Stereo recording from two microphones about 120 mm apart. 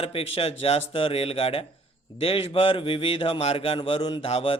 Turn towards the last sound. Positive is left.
turn(degrees=55)  # may be behind; listen again after turning